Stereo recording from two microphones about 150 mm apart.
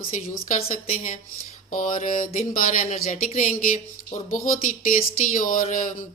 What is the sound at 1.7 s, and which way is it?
Speech, 65° left (ahead or behind).